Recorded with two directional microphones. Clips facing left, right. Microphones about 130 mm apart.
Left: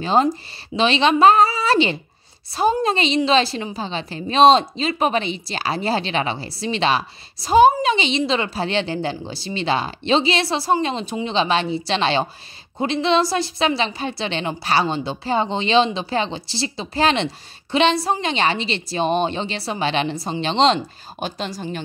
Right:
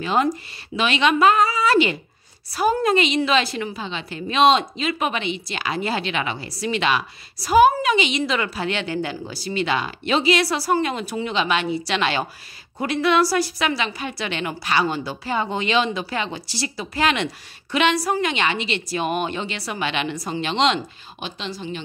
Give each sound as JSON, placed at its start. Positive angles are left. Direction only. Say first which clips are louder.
{"t": 0.0, "sound": "a woman's voice", "louder": "left 3 dB", "side_deg": 30}